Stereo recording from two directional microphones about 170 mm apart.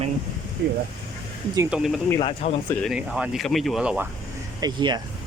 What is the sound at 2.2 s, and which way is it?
Speech, 35° left (ahead or behind).